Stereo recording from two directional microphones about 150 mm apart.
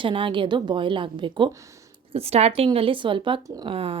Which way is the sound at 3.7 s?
40° right (ahead or behind).